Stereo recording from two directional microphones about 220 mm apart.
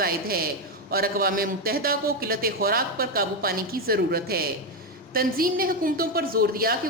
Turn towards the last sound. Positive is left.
turn(degrees=-40)  # may be behind; listen again after turning